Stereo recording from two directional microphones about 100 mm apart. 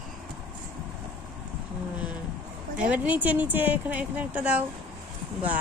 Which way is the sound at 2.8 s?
15° right (ahead or behind).